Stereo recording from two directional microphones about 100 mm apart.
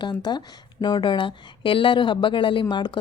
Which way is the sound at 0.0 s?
50° left (ahead or behind).